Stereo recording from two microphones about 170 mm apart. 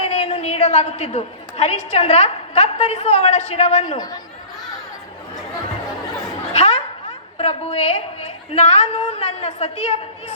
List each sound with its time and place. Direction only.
0.0 s a woman's voice: 40° left (ahead or behind)
3.9 s speech: 20° left (ahead or behind)
6.5 s snicker: 40° left (ahead or behind)
7.3 s a woman's voice: 35° left (ahead or behind)